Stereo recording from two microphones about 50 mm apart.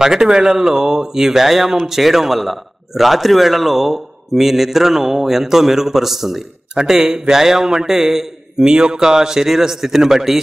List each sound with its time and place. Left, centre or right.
0.0 s a man's voice: centre